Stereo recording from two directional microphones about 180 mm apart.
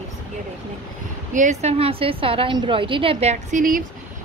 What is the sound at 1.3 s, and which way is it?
A woman's voice, 45° right (ahead or behind).